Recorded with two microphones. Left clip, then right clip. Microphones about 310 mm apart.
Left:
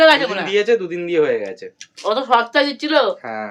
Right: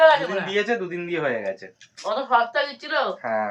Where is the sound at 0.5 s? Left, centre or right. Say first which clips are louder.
Left 10 dB; centre.